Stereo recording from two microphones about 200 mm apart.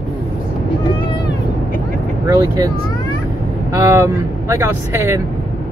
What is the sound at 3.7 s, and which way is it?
Speech, 15° right (ahead or behind).